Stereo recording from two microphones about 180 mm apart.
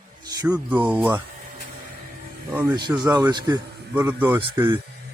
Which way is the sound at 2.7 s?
25° right (ahead or behind).